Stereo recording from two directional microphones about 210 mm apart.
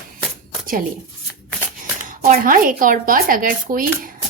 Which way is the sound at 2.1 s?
40° right (ahead or behind).